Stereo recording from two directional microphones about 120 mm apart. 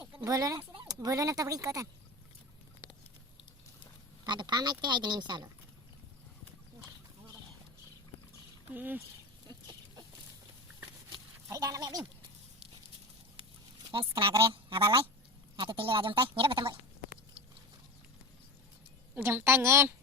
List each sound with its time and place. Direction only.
0.3 s speech: 30° right (ahead or behind)
4.2 s speech: 35° right (ahead or behind)
8.7 s speech: 15° right (ahead or behind)
11.4 s speech: 30° right (ahead or behind)
14.5 s speech: 45° right (ahead or behind)
19.1 s speech: 20° right (ahead or behind)